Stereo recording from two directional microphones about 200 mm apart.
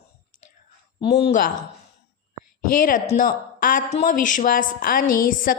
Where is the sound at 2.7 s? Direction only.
45° left (ahead or behind).